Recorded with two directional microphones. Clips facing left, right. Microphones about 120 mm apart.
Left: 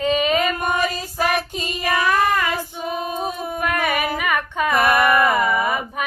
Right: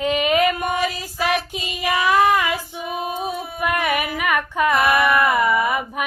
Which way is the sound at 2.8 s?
40° left (ahead or behind).